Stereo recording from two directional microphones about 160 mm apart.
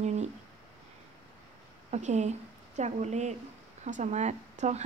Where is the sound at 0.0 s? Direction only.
45° right (ahead or behind).